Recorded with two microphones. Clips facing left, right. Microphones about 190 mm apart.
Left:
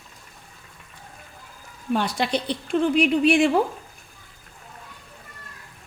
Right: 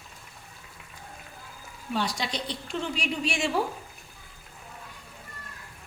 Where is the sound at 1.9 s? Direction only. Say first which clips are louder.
Left 6 dB; 55° left (ahead or behind).